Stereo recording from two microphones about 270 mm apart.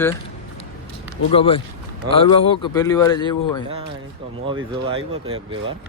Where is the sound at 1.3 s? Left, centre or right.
Centre.